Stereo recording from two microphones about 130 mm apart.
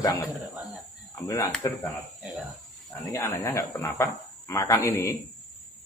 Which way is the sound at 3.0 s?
25° left (ahead or behind).